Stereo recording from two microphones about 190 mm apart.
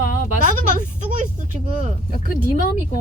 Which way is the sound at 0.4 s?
40° right (ahead or behind).